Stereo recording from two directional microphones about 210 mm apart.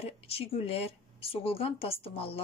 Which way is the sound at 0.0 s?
30° left (ahead or behind).